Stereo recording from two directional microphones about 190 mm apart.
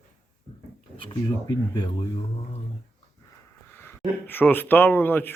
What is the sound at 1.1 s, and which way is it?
Speech, 20° left (ahead or behind).